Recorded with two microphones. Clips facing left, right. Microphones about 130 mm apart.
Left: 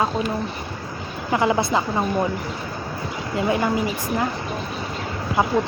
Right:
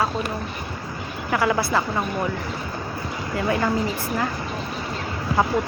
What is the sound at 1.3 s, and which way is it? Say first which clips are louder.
Speech: left 2 dB; 20° left (ahead or behind).